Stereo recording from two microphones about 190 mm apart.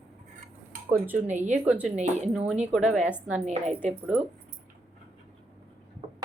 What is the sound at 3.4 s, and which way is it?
Speech, 35° right (ahead or behind).